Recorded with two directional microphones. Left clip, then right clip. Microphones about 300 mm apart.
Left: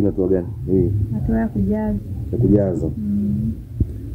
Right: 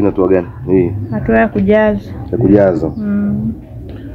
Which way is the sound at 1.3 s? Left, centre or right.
Right.